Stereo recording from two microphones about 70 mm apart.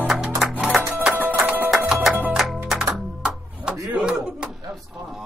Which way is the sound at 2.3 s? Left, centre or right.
Centre.